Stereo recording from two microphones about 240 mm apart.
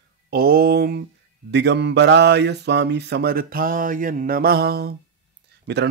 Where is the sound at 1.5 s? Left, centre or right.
Right.